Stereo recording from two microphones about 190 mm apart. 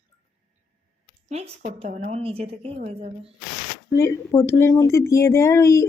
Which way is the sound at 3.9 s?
15° left (ahead or behind).